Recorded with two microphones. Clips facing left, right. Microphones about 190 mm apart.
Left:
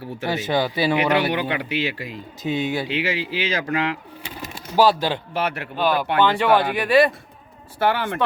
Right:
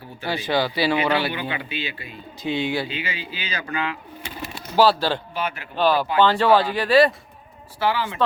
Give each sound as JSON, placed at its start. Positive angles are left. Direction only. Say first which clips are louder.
{"t": 0.3, "sound": "speech", "louder": "left 1 dB", "side_deg": 20}
{"t": 1.3, "sound": "speech", "louder": "left 5 dB", "side_deg": 80}
{"t": 2.4, "sound": "speech", "louder": "left 1 dB", "side_deg": 45}
{"t": 2.8, "sound": "speech", "louder": "left 6 dB", "side_deg": 90}
{"t": 4.8, "sound": "speech", "louder": "even", "side_deg": 15}
{"t": 5.3, "sound": "a man's voice", "louder": "left 3 dB", "side_deg": 75}
{"t": 5.7, "sound": "speech", "louder": "right 2 dB", "side_deg": 10}
{"t": 7.8, "sound": "speech", "louder": "left 2 dB", "side_deg": 55}